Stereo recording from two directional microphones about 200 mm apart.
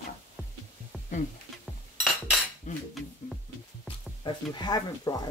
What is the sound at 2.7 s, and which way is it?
Cutlery, 40° left (ahead or behind).